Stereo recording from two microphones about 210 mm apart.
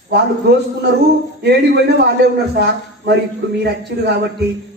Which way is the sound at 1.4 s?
50° right (ahead or behind).